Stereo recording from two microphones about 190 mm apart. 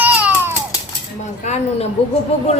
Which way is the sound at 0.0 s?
10° right (ahead or behind).